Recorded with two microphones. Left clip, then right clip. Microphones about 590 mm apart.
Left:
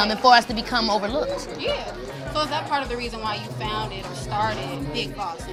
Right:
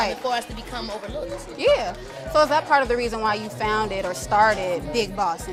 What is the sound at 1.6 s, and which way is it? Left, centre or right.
Speech, right.